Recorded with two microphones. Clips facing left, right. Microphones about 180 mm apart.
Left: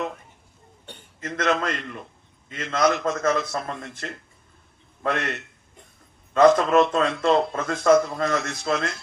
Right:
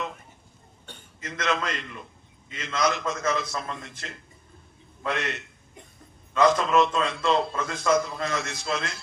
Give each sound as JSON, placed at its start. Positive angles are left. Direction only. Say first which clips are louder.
{"t": 1.2, "sound": "a man's voice", "louder": "left 4 dB", "side_deg": 50}